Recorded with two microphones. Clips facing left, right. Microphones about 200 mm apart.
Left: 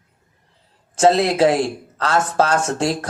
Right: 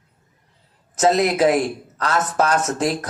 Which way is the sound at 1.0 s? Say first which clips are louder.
Left 2 dB; 30° left (ahead or behind).